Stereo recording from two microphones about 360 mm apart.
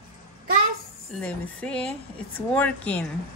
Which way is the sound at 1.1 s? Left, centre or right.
Centre.